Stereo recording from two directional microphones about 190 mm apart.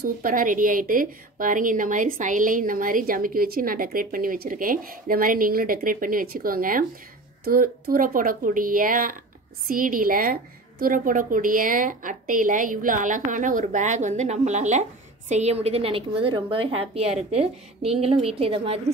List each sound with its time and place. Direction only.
0.0 s a woman's voice: 45° right (ahead or behind); by 18.8 s 30° right (ahead or behind)